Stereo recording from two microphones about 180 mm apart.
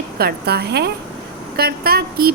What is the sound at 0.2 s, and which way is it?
A woman's voice, 65° right (ahead or behind).